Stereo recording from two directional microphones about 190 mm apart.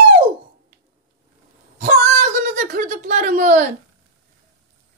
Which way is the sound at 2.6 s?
40° right (ahead or behind).